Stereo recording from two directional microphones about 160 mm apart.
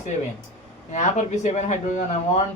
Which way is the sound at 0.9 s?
45° left (ahead or behind).